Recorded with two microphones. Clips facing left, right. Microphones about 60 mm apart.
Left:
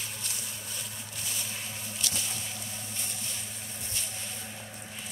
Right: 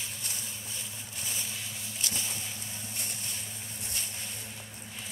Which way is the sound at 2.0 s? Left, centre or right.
Right.